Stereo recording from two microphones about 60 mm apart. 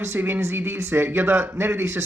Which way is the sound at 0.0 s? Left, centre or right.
Right.